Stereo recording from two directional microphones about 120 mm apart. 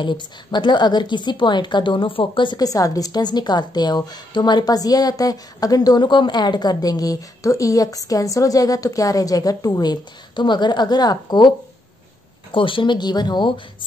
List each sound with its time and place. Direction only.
0.0 s a woman's voice: 40° left (ahead or behind)
12.5 s a woman's voice: 45° left (ahead or behind)